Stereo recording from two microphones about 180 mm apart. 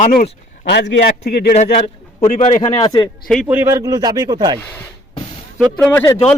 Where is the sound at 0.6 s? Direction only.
75° left (ahead or behind).